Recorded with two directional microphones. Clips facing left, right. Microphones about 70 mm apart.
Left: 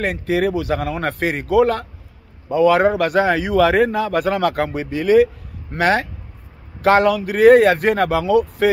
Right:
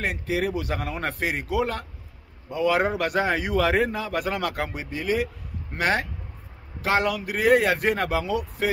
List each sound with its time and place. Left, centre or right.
0.0 s a man's voice: left
6.8 s speech: left